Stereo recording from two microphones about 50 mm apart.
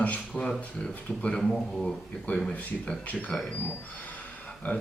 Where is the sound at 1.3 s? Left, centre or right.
Centre.